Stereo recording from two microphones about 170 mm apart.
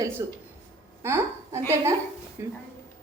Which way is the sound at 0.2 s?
15° right (ahead or behind).